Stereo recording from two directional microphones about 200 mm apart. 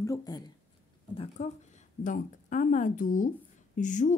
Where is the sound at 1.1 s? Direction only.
25° left (ahead or behind).